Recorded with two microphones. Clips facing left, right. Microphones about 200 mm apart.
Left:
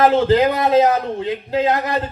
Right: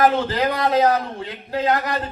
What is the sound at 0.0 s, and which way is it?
Speech, 25° left (ahead or behind).